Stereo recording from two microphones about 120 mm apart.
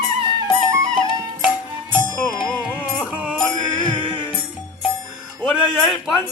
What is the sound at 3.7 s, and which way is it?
Music, 35° left (ahead or behind).